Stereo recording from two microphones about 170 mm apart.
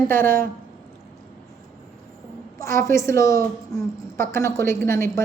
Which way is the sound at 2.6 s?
15° left (ahead or behind).